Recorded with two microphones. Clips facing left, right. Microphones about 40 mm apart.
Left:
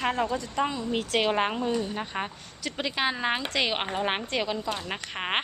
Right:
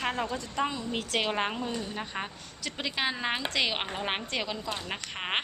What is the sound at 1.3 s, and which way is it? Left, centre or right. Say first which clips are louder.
A woman's voice: left 5 dB; left.